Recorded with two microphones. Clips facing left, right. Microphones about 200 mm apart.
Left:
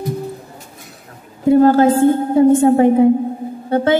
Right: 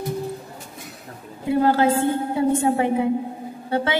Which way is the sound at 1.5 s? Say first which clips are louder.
Left 8 dB; 45° left (ahead or behind).